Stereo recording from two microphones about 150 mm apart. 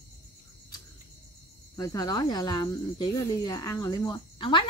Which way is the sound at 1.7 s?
25° left (ahead or behind).